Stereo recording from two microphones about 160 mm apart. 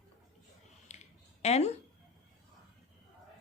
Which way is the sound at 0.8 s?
45° left (ahead or behind).